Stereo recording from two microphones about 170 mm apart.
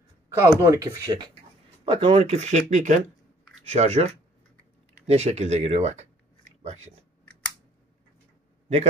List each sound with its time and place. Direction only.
0.6 s speech: 15° right (ahead or behind); by 6.9 s 40° right (ahead or behind)